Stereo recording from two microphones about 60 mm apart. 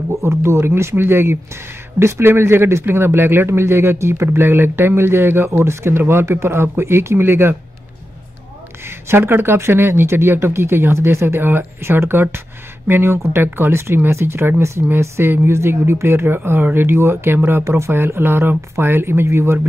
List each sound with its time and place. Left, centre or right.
0.1 s speech: right
8.8 s speech: right
14.6 s speech: right